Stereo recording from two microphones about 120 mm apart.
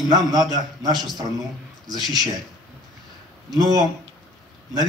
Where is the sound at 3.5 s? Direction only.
35° right (ahead or behind).